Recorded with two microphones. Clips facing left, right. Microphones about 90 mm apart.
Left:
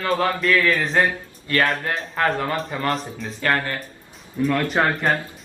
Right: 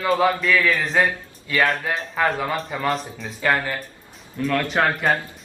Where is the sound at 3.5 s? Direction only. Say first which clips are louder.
Even; 10° right (ahead or behind).